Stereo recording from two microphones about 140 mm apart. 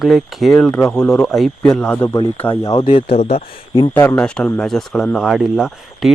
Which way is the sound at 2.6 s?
25° left (ahead or behind).